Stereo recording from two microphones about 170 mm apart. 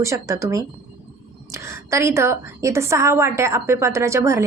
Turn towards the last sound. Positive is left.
turn(degrees=-15)  # may be behind; listen again after turning